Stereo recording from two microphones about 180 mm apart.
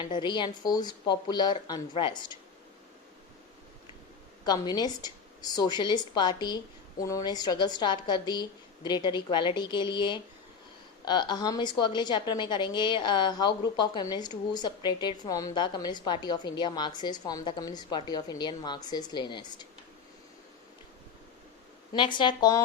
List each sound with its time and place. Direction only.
0.0 s a woman's voice: 25° left (ahead or behind)
4.4 s a woman's voice: 20° left (ahead or behind)
21.9 s a woman's voice: 25° left (ahead or behind)